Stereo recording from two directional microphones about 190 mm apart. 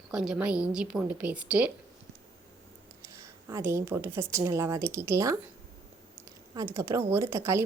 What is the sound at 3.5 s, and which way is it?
A woman's voice, 15° right (ahead or behind).